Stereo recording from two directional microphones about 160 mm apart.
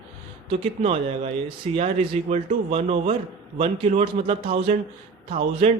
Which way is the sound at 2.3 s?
40° right (ahead or behind).